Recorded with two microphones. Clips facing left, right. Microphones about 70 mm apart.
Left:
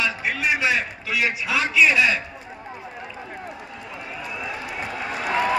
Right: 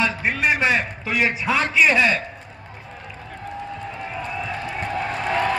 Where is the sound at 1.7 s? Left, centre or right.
Right.